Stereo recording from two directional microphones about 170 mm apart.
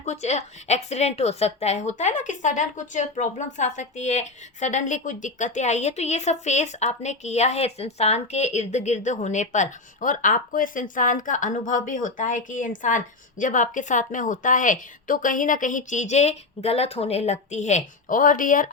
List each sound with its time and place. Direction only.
0.0 s a woman's voice: 40° left (ahead or behind)